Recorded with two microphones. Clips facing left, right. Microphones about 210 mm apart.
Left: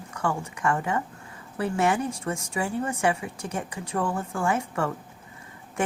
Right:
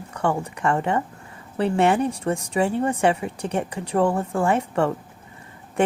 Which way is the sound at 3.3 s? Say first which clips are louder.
Right 7 dB; 65° right (ahead or behind).